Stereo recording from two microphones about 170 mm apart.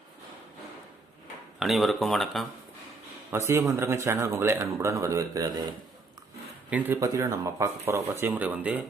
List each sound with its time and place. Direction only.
1.5 s speech: centre (ahead or behind)
3.3 s speech: 15° right (ahead or behind)
6.7 s speech: 10° right (ahead or behind)